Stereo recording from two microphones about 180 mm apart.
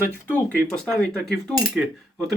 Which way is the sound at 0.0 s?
10° left (ahead or behind).